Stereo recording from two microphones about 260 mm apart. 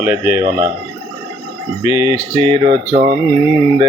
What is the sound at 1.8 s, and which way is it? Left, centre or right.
Speech, centre.